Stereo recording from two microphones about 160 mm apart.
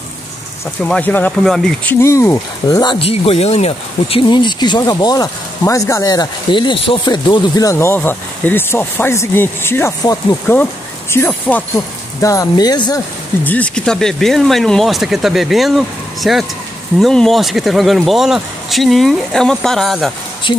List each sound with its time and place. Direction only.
0.8 s speech: 10° left (ahead or behind)
2.0 s speech: 15° left (ahead or behind)
13.4 s speech: 10° left (ahead or behind)